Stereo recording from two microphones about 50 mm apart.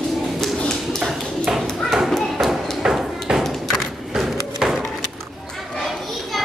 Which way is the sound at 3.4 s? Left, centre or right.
Centre.